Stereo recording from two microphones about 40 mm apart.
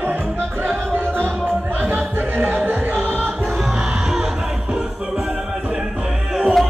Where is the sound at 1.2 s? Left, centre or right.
Right.